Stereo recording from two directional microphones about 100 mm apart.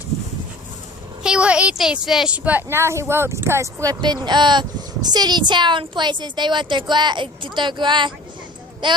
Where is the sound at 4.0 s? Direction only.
45° right (ahead or behind).